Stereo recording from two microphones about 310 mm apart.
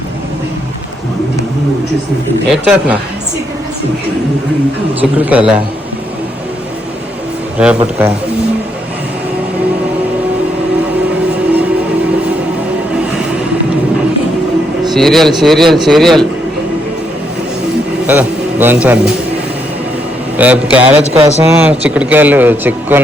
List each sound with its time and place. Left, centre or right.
2.5 s speech: centre
4.9 s speech: centre
7.6 s speech: centre
14.8 s speech: centre
18.0 s a man's voice: centre
20.3 s speech: centre
21.0 s speech: centre
21.4 s speech: centre